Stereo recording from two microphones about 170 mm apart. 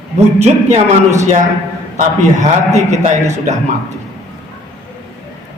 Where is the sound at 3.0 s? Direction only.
45° right (ahead or behind).